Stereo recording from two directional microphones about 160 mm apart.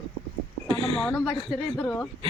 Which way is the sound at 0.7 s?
35° right (ahead or behind).